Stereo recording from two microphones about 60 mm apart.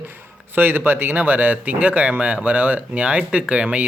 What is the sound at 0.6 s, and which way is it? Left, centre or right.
Speech, right.